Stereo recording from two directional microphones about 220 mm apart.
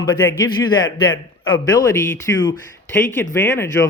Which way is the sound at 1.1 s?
65° left (ahead or behind).